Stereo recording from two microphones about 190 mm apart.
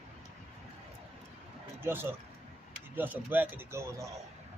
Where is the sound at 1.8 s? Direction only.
10° right (ahead or behind).